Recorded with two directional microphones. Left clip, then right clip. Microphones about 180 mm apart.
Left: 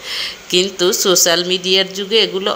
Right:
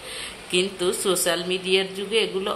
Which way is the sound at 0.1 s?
35° left (ahead or behind).